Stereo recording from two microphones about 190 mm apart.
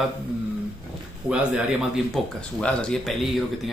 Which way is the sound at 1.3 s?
5° right (ahead or behind).